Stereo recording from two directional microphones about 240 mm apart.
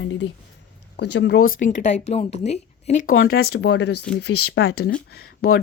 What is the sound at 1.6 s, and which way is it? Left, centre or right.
Speech, left.